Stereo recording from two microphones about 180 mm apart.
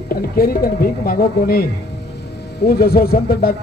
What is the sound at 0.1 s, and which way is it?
Speech, 55° left (ahead or behind).